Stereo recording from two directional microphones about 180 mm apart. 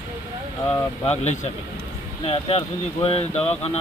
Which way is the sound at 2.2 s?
35° left (ahead or behind).